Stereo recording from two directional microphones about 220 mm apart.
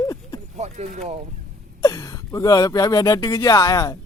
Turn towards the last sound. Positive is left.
turn(degrees=15)  # may be behind; listen again after turning